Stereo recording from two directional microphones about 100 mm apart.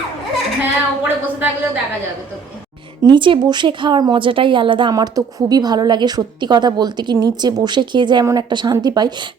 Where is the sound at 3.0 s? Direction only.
55° right (ahead or behind).